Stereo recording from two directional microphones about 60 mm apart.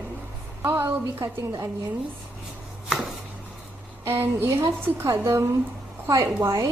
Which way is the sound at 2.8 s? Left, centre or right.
Centre.